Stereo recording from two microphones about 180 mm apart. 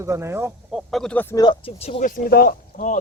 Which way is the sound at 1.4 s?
25° left (ahead or behind).